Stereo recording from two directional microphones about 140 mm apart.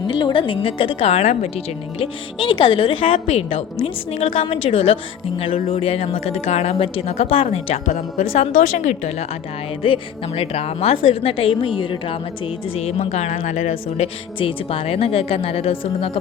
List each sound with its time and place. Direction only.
0.2 s a woman's voice: 35° left (ahead or behind); by 9.2 s 55° left (ahead or behind)
9.8 s a woman's voice: 40° left (ahead or behind)
12.7 s speech: 50° left (ahead or behind)
13.4 s speech: 65° left (ahead or behind); by 16.1 s 40° left (ahead or behind)